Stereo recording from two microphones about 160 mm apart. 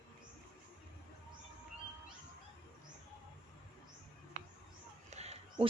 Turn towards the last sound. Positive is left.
turn(degrees=-40)  # may be behind; listen again after turning